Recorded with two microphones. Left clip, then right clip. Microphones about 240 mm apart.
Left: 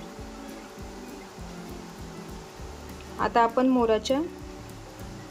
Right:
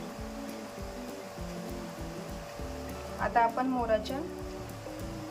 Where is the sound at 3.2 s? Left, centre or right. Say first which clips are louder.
Left 5 dB; centre.